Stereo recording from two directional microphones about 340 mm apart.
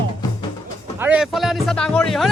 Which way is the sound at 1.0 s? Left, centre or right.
Centre.